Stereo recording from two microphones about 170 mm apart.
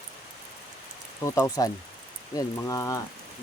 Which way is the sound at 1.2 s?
20° left (ahead or behind).